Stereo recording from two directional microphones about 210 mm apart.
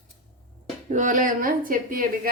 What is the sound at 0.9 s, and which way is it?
Speech, 35° right (ahead or behind).